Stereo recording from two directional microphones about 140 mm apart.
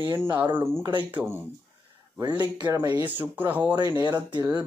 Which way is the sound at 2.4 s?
25° right (ahead or behind).